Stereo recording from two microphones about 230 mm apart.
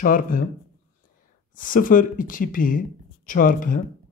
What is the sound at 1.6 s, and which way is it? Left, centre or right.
Speech, left.